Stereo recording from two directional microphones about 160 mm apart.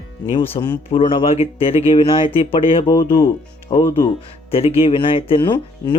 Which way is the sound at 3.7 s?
40° left (ahead or behind).